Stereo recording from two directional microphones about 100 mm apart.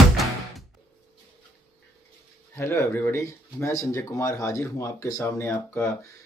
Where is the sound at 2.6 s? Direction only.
25° left (ahead or behind).